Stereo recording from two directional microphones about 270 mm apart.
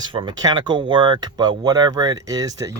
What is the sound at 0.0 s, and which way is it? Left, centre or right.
Speech, centre.